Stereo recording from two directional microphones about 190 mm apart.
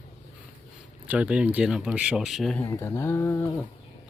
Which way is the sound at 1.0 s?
5° right (ahead or behind).